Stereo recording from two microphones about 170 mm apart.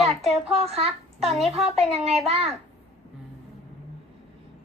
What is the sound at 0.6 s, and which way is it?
Speech, 35° right (ahead or behind).